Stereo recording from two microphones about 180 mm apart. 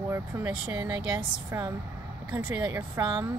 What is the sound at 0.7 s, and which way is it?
Speech, 20° right (ahead or behind).